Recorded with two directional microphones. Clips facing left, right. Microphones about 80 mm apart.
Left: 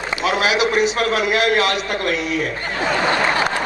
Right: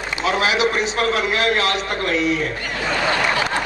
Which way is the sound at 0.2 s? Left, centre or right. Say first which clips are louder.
Even; right.